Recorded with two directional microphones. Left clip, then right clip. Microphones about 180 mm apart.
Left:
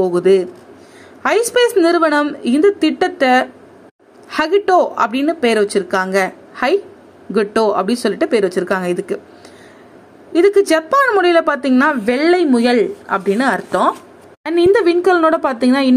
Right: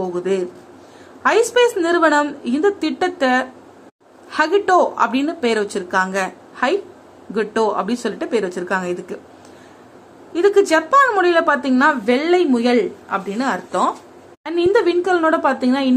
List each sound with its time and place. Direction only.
0.0 s speech: 30° left (ahead or behind)
10.3 s speech: 25° left (ahead or behind)